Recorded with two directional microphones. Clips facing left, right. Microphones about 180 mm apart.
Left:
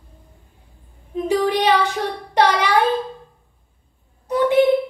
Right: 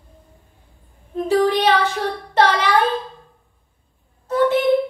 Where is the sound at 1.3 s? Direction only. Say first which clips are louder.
Right 1 dB; 15° left (ahead or behind).